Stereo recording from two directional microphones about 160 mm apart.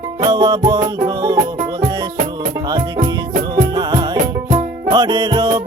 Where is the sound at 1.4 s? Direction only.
55° right (ahead or behind).